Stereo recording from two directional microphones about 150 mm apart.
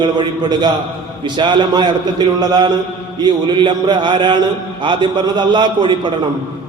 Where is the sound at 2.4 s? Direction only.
30° right (ahead or behind).